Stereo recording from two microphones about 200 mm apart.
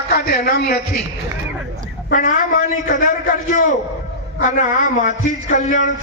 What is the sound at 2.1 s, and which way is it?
Speech, 40° left (ahead or behind).